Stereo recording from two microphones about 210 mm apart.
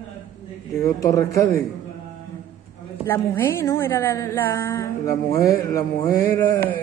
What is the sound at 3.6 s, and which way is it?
A woman's voice, 10° left (ahead or behind).